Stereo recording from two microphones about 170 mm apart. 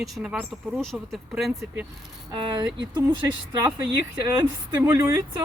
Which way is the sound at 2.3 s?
25° right (ahead or behind).